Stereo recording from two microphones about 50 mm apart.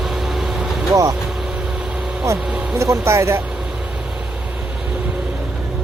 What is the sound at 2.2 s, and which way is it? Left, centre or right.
Speech, right.